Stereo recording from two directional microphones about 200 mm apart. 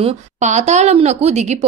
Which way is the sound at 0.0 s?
35° right (ahead or behind).